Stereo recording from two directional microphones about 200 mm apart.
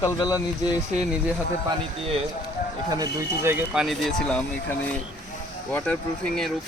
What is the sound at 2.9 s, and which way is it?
Speech, 15° right (ahead or behind).